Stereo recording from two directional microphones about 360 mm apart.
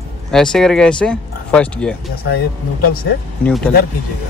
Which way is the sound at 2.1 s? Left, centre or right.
Left.